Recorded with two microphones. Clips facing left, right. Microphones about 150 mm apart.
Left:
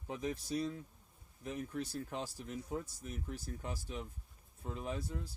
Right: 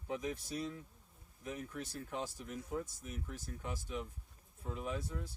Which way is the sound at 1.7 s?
35° left (ahead or behind).